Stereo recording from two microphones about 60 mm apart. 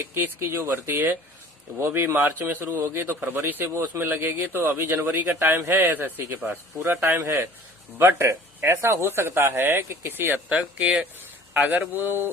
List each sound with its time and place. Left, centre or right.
0.0 s speech: right
10.5 s speech: right